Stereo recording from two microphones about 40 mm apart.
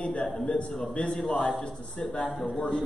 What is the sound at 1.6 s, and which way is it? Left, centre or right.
Speech, centre.